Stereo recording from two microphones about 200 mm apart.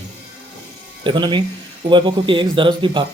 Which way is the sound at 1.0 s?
25° right (ahead or behind).